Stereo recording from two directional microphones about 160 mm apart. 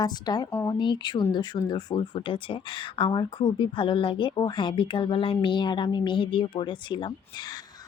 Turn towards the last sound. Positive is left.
turn(degrees=30)  # may be behind; listen again after turning